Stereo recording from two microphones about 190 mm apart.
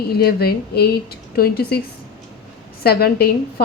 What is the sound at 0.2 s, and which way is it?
Speech, 55° left (ahead or behind).